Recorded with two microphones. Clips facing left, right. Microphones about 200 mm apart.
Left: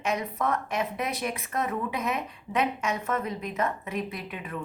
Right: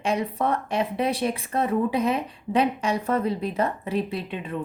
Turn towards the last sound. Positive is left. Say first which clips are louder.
# right 6 dB
turn(degrees=-30)  # may be behind; listen again after turning